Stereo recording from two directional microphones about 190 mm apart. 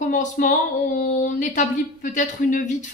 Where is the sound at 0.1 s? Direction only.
40° left (ahead or behind).